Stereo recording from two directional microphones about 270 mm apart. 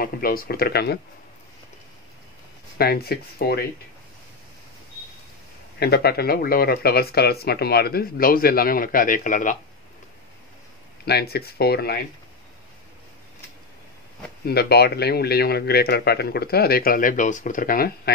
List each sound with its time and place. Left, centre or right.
0.0 s speech: left
2.8 s speech: left
5.8 s speech: left
11.1 s speech: left
14.4 s speech: left